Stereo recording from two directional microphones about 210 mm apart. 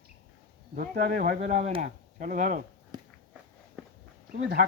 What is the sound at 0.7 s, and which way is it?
Speech, 45° right (ahead or behind).